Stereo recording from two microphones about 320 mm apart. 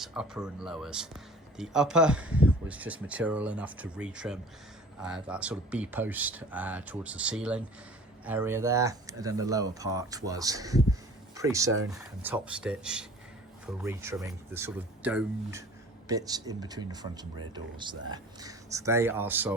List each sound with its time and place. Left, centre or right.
0.0 s speech: centre